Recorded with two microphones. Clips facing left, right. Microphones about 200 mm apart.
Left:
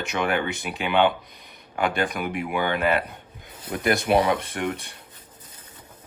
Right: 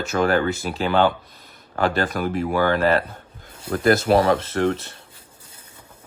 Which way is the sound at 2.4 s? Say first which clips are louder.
Right 5 dB; 40° right (ahead or behind).